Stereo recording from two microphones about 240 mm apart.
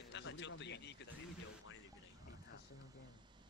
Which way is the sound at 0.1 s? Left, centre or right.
Left.